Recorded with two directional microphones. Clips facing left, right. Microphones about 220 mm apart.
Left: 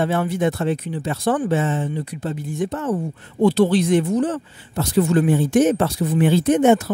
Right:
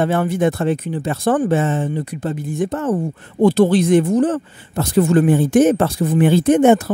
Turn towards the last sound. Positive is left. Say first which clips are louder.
# right 3 dB
turn(degrees=-50)  # may be behind; listen again after turning